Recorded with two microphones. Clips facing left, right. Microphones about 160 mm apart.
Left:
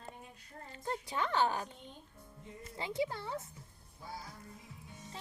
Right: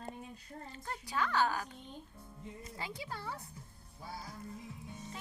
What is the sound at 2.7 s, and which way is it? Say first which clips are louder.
Speech: left 9 dB; 25° left (ahead or behind).